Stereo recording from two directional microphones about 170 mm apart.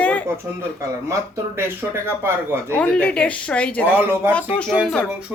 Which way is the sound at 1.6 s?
15° right (ahead or behind).